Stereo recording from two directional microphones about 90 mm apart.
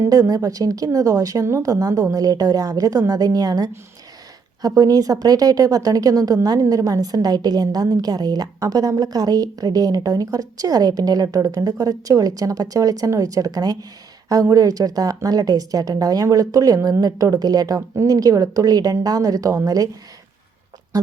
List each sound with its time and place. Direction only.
0.1 s a woman's voice: 40° right (ahead or behind)
20.9 s speech: 45° right (ahead or behind)